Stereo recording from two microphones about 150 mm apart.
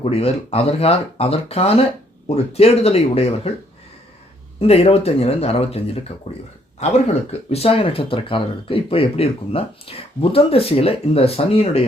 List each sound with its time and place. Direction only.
0.0 s speech: 45° left (ahead or behind)
4.6 s speech: 45° left (ahead or behind)